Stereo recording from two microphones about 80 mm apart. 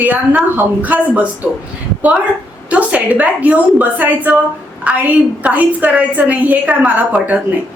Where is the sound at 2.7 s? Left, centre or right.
Centre.